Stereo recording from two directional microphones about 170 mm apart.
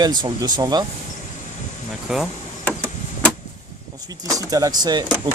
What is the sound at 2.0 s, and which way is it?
Speech, centre (ahead or behind).